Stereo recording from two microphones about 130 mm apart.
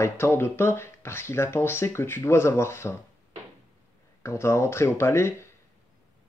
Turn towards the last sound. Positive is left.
turn(degrees=20)  # may be behind; listen again after turning